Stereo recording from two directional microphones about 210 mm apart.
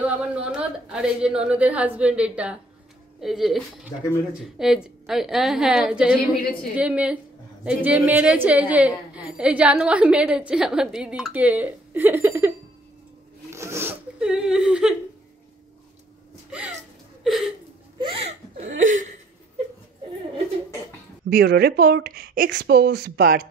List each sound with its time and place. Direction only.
0.0 s a woman's voice: 5° right (ahead or behind)
13.5 s zipper: 15° right (ahead or behind)
16.4 s a sound: 5° right (ahead or behind)
17.9 s laughter: 25° right (ahead or behind)
21.3 s speech: 45° right (ahead or behind)